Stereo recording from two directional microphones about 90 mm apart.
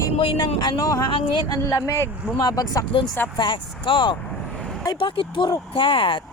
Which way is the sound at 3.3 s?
65° left (ahead or behind).